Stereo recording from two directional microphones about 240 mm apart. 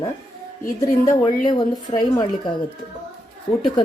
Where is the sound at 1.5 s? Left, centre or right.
Centre.